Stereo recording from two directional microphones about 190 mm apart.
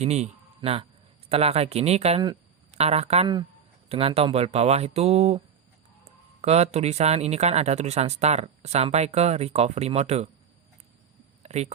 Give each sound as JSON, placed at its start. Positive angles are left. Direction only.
{"t": 0.0, "sound": "a man's voice", "side_deg": -35}
{"t": 6.4, "sound": "speech", "side_deg": -35}
{"t": 11.4, "sound": "speech", "side_deg": -35}